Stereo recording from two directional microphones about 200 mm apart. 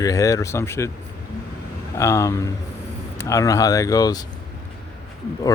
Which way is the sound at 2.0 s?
15° left (ahead or behind).